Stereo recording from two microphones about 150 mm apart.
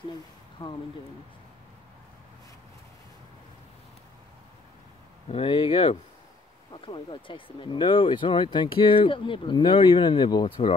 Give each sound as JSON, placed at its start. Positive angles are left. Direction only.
{"t": 0.6, "sound": "speech", "side_deg": 25}
{"t": 5.3, "sound": "speech", "side_deg": 35}